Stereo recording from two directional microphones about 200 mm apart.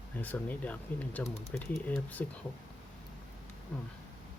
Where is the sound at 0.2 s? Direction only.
10° left (ahead or behind).